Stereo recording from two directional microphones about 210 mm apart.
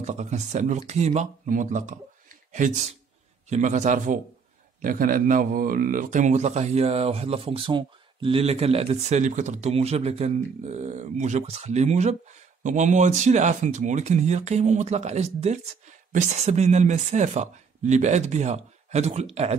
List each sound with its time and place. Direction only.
0.0 s a man's voice: 35° right (ahead or behind)